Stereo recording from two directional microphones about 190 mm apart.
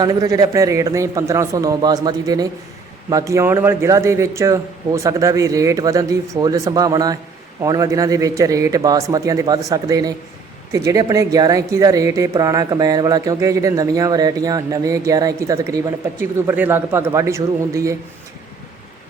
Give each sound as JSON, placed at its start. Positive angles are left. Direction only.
{"t": 0.0, "sound": "a man's voice", "side_deg": -20}